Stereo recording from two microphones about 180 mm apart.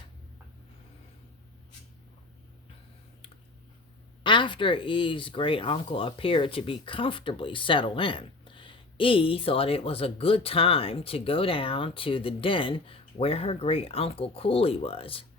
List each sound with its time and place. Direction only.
4.2 s speech: 25° left (ahead or behind)